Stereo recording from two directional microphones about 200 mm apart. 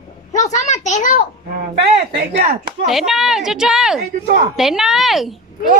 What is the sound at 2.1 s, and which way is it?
Speech, 50° right (ahead or behind).